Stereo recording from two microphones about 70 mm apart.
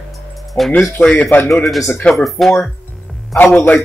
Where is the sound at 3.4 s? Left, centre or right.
Left.